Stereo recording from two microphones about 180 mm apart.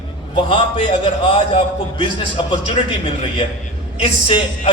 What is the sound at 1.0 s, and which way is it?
Speech, 30° left (ahead or behind).